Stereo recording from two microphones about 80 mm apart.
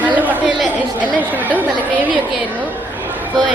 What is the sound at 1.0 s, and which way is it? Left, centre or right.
A woman's voice, right.